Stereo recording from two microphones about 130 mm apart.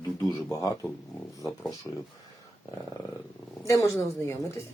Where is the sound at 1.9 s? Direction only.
5° left (ahead or behind).